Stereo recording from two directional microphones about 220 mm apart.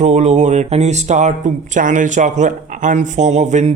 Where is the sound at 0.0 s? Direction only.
30° right (ahead or behind).